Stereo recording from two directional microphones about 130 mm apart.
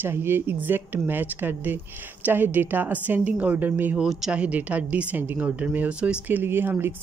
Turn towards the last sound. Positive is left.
turn(degrees=-15)  # may be behind; listen again after turning